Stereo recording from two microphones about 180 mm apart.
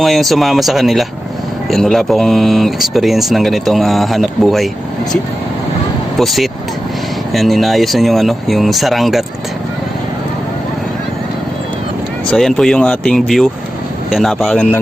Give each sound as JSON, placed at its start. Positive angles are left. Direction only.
{"t": 0.0, "sound": "speech", "side_deg": 0}
{"t": 6.1, "sound": "speech", "side_deg": 0}
{"t": 12.3, "sound": "speech", "side_deg": 5}